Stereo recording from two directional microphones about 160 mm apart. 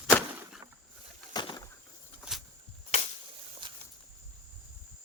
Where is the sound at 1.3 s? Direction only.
25° left (ahead or behind).